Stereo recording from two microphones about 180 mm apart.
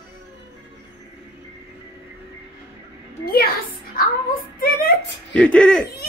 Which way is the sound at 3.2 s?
60° left (ahead or behind).